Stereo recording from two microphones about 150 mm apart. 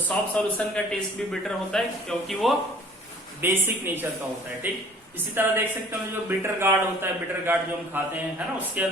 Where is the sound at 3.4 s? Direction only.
15° right (ahead or behind).